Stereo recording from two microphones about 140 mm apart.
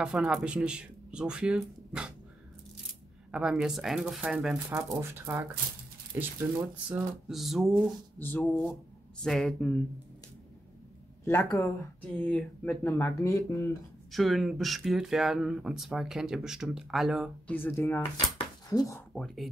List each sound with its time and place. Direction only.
0.0 s speech: 5° right (ahead or behind)
3.3 s speech: 5° right (ahead or behind)
4.6 s speech: 20° right (ahead or behind)
6.9 s speech: centre (ahead or behind)
8.2 s speech: 10° left (ahead or behind)
11.2 s speech: 20° left (ahead or behind)
12.2 s speech: 10° left (ahead or behind)
14.1 s speech: centre (ahead or behind)
17.5 s speech: 15° left (ahead or behind)
19.1 s speech: 5° left (ahead or behind)